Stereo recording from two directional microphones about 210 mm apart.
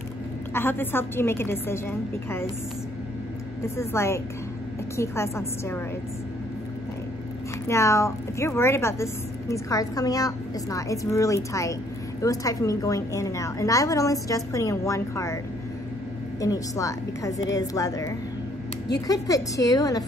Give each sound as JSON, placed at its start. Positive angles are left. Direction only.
{"t": 0.5, "sound": "speech", "side_deg": 10}
{"t": 3.7, "sound": "speech", "side_deg": 10}
{"t": 7.6, "sound": "speech", "side_deg": 15}
{"t": 16.3, "sound": "speech", "side_deg": 15}